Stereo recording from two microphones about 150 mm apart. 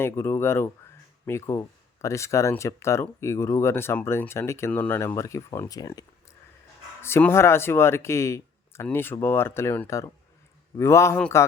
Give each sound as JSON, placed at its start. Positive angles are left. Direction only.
{"t": 0.0, "sound": "speech", "side_deg": 15}